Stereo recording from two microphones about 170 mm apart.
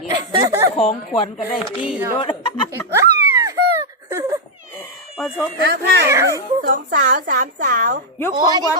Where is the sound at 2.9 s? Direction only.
15° right (ahead or behind).